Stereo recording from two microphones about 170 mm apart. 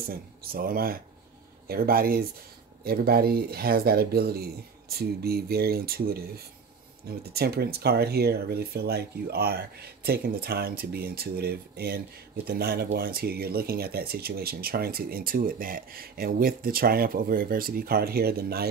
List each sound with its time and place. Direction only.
0.1 s speech: 60° right (ahead or behind)